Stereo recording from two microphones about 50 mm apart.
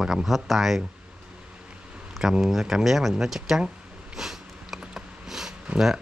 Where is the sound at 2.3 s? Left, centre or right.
Centre.